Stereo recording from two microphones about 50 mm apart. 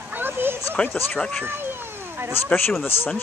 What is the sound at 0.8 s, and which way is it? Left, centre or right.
Speech, left.